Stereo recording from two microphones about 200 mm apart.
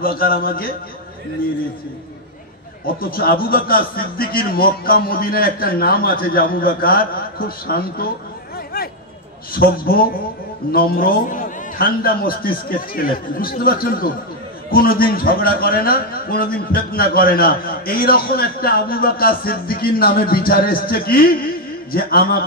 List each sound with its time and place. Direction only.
0.0 s a man's voice: 45° left (ahead or behind)
3.0 s a man's voice: 45° left (ahead or behind)
8.7 s a sound: 50° left (ahead or behind)
9.5 s a man's voice: 45° left (ahead or behind)